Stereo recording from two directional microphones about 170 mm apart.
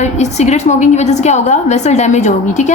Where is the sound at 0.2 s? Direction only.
40° left (ahead or behind).